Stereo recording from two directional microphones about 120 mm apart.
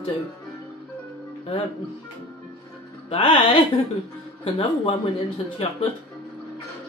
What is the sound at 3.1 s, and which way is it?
A man's voice, 45° left (ahead or behind).